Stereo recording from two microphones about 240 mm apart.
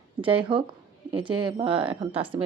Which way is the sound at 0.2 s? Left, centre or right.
Right.